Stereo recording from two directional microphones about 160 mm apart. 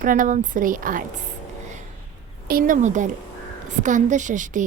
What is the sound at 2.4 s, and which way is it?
Speech, 60° right (ahead or behind).